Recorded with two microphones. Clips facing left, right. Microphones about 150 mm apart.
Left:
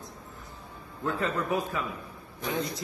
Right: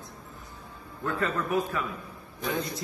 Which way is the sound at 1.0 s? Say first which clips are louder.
Even; 20° left (ahead or behind).